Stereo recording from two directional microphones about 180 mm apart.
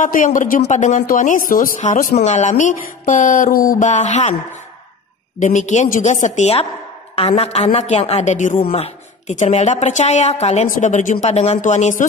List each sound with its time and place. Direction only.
0.0 s a man's voice: 45° left (ahead or behind)
5.4 s a woman's voice: 40° left (ahead or behind)